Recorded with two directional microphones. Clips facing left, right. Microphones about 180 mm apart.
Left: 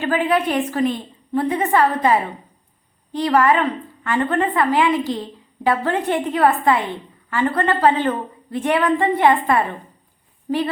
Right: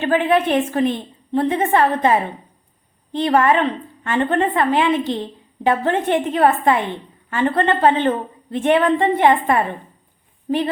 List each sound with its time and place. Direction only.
0.0 s a woman's voice: 25° right (ahead or behind)